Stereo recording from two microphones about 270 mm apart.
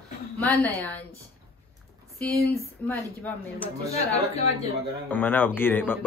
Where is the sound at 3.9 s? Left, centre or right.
Left.